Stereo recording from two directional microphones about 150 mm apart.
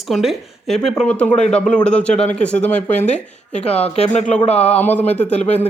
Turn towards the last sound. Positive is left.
turn(degrees=45)  # may be behind; listen again after turning